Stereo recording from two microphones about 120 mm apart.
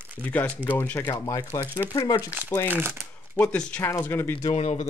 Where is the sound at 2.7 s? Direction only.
20° right (ahead or behind).